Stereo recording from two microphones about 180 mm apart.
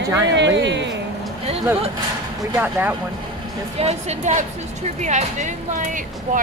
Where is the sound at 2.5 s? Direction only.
10° right (ahead or behind).